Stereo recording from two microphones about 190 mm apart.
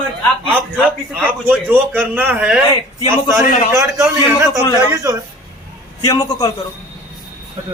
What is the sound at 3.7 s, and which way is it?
Speech, 15° right (ahead or behind).